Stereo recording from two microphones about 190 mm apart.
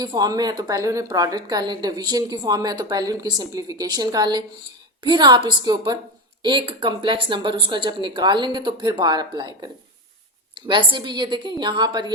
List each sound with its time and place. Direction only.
0.0 s a woman's voice: 20° right (ahead or behind)